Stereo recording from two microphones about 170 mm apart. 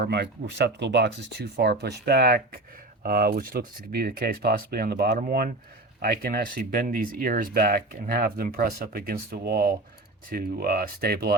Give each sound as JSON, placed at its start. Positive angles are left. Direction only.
{"t": 0.0, "sound": "speech", "side_deg": -80}